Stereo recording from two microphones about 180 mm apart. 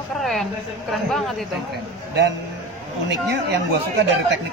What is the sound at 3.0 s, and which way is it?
Speech, 70° right (ahead or behind).